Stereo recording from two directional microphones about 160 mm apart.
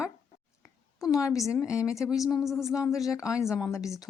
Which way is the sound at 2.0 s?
Centre (ahead or behind).